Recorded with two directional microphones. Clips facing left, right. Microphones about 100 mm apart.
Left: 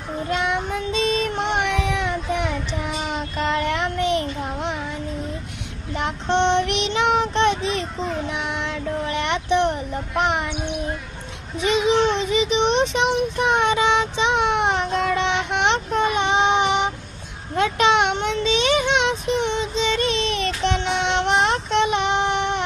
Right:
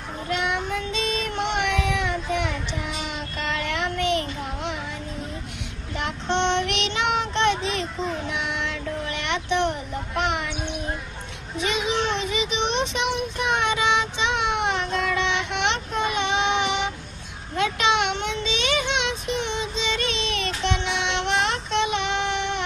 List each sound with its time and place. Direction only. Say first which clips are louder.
0.3 s child singing: left 2 dB; 30° left (ahead or behind)
5.9 s child singing: left 4 dB; 30° left (ahead or behind)
10.1 s a sound: left 4 dB; 30° left (ahead or behind)
11.6 s child singing: left 7 dB; 30° left (ahead or behind)